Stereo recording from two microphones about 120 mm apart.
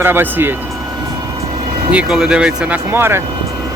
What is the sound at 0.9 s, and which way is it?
Vehicle, 35° right (ahead or behind).